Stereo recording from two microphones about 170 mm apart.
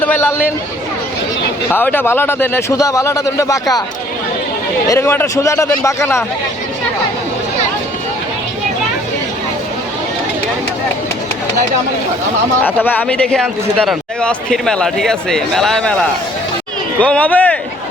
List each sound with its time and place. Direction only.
0.0 s speech: 10° left (ahead or behind)
1.7 s speech: 10° left (ahead or behind)
4.9 s speech: 15° left (ahead or behind)
12.6 s speech: 10° left (ahead or behind)